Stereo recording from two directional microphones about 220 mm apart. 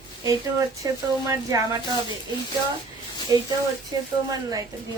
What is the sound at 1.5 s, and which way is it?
Speech, 15° right (ahead or behind).